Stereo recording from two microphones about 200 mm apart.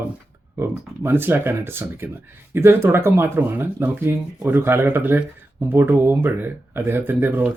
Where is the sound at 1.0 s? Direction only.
10° right (ahead or behind).